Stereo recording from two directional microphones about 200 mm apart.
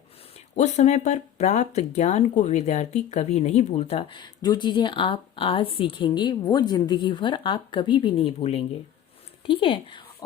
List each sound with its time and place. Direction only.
0.5 s speech: 35° left (ahead or behind)